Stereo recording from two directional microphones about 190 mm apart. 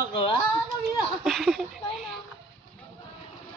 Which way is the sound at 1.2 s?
Centre (ahead or behind).